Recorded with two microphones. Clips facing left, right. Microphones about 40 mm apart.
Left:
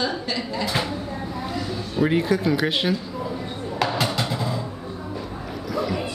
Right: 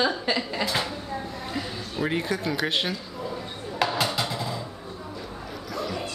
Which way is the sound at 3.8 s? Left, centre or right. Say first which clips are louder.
Left 1 dB; centre.